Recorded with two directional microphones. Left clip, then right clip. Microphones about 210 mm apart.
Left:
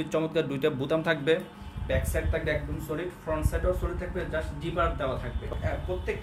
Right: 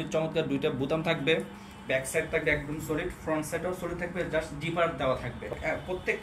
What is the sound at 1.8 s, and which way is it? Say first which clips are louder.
Speech: right 2 dB; 25° left (ahead or behind).